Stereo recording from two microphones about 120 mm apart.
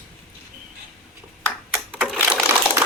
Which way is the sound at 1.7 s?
Centre (ahead or behind).